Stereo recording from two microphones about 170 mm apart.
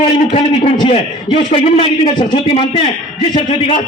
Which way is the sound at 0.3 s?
35° left (ahead or behind).